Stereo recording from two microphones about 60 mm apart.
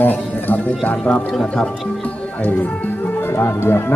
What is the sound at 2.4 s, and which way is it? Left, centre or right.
Speech, left.